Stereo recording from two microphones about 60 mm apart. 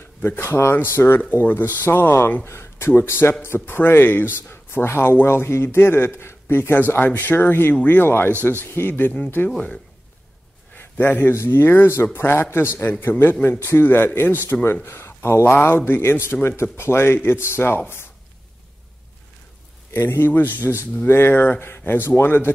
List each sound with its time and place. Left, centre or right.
0.2 s speech: left
2.4 s a sound: left
2.9 s speech: left
7.7 s speech: left
8.0 s speech: left
9.4 s speech: left
10.8 s a man's voice: left
11.3 s speech: left
19.9 s speech: left